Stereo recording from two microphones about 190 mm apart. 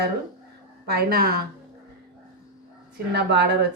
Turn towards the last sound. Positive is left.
turn(degrees=-60)  # may be behind; listen again after turning